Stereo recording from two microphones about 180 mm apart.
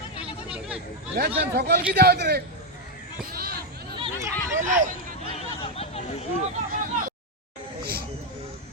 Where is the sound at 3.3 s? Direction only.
60° right (ahead or behind).